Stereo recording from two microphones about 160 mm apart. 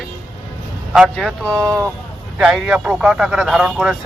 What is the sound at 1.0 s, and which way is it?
A man's voice, 5° left (ahead or behind).